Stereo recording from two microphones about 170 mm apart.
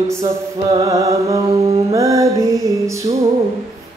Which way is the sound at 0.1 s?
20° right (ahead or behind).